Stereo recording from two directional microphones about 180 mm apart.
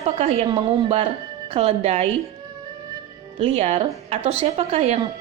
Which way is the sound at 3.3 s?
35° right (ahead or behind).